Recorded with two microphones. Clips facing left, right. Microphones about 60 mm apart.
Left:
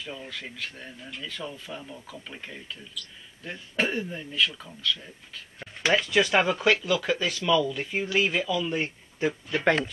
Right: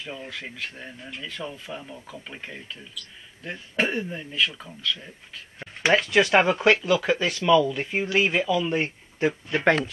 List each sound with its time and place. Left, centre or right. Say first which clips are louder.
0.0 s speech: right 2 dB; centre